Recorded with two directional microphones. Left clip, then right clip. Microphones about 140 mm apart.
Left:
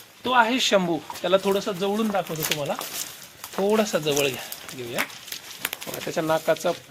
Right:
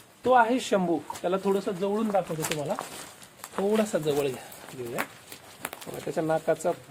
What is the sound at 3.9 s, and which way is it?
Speech, 20° left (ahead or behind).